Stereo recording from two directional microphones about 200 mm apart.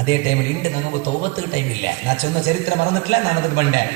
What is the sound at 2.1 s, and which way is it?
A man's voice, 55° left (ahead or behind).